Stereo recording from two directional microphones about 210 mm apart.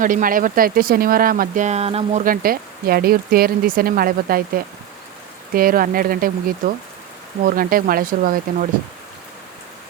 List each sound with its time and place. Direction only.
0.0 s speech: 40° right (ahead or behind)
2.2 s speech: 45° right (ahead or behind)